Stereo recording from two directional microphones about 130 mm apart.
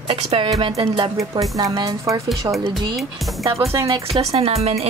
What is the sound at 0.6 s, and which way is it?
Music, 40° right (ahead or behind).